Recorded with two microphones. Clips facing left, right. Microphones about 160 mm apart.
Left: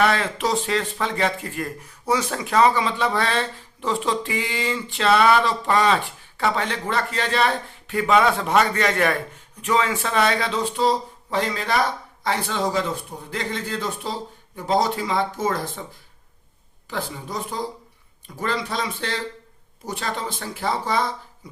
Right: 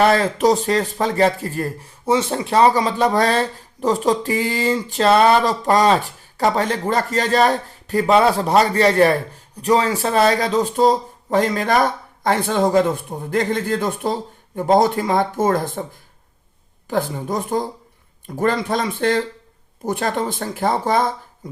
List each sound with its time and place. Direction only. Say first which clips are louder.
0.0 s speech: right 6 dB; 40° right (ahead or behind)
16.9 s speech: right 8 dB; 50° right (ahead or behind)